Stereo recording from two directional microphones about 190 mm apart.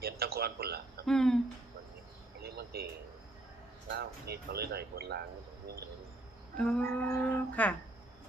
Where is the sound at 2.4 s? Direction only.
55° right (ahead or behind).